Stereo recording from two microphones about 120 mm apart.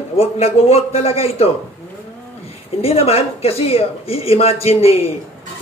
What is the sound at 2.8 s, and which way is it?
A woman's voice, 55° left (ahead or behind).